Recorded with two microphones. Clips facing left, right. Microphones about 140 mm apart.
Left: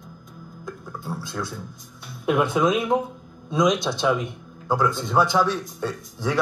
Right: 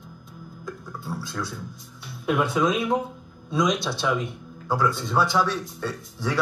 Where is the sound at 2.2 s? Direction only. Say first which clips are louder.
Left 2 dB; 20° left (ahead or behind).